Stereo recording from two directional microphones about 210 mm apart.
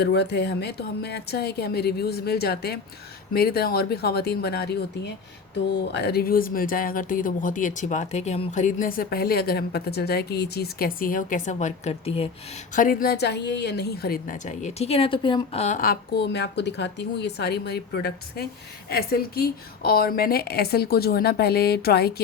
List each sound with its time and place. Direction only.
0.0 s a woman's voice: 50° left (ahead or behind); by 12.3 s 30° left (ahead or behind)
12.7 s a woman's voice: 40° left (ahead or behind)